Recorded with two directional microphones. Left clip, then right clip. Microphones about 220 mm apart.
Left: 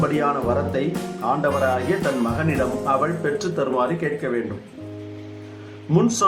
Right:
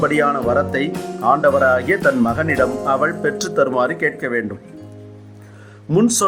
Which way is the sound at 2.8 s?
50° right (ahead or behind).